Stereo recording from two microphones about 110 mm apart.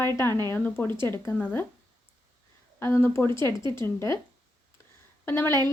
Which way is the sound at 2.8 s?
25° left (ahead or behind).